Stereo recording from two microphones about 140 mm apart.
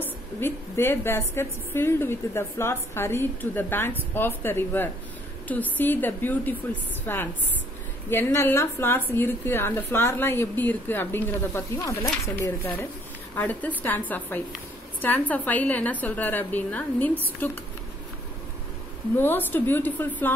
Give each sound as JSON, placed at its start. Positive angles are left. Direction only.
{"t": 0.0, "sound": "a woman's voice", "side_deg": 15}
{"t": 19.1, "sound": "a woman's voice", "side_deg": 15}